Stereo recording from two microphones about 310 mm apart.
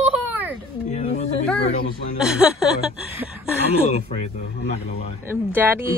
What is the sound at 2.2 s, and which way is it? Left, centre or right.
A woman's voice, centre.